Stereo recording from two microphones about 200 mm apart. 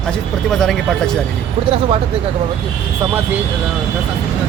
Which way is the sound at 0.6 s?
Centre (ahead or behind).